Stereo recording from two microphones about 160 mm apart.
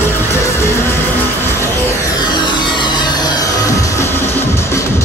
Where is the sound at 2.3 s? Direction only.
30° left (ahead or behind).